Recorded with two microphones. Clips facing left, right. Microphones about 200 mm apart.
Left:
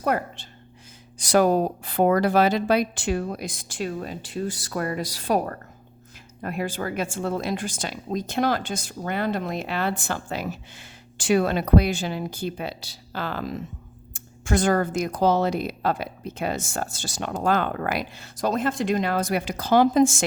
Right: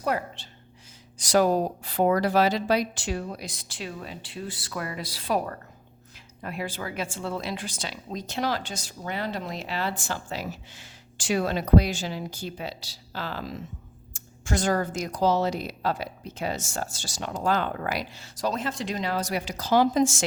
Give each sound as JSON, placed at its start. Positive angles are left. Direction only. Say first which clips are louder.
{"t": 0.0, "sound": "a woman's voice", "louder": "left 3 dB", "side_deg": 50}